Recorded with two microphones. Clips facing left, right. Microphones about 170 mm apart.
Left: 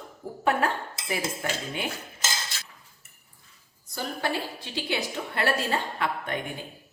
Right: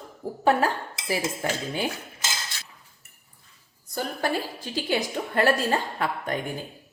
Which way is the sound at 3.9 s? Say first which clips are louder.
Right 3 dB; 45° right (ahead or behind).